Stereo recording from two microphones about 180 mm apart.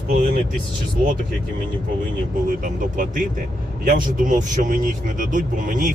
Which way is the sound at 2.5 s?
50° right (ahead or behind).